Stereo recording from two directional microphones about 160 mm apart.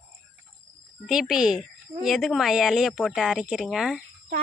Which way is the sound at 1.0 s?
5° right (ahead or behind).